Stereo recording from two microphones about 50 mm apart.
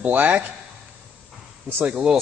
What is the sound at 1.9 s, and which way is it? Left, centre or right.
Speech, right.